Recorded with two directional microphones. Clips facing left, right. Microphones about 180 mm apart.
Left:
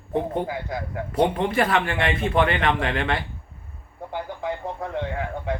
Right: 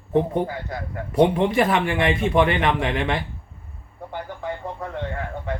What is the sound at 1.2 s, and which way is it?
Speech, 15° right (ahead or behind).